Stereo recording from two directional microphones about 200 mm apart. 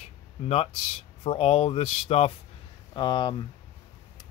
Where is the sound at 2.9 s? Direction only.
20° left (ahead or behind).